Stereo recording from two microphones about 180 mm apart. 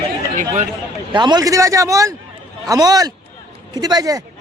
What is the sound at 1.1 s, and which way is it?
Speech, 25° right (ahead or behind).